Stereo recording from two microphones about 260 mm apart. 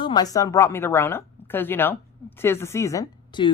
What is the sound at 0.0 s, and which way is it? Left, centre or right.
A woman's voice, centre.